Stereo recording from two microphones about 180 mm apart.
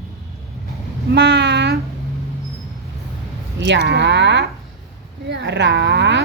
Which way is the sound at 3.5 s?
80° right.